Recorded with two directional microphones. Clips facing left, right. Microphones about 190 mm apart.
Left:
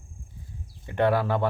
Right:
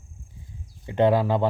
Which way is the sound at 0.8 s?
20° right (ahead or behind).